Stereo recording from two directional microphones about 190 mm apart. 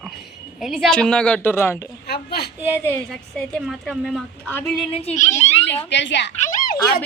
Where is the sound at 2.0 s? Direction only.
55° left (ahead or behind).